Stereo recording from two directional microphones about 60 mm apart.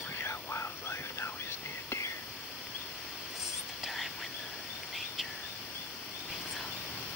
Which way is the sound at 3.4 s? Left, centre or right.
Centre.